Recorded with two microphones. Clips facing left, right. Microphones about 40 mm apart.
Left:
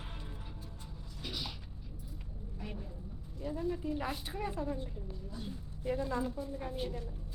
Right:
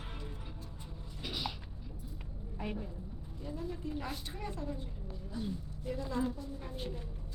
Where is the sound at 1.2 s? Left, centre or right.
Centre.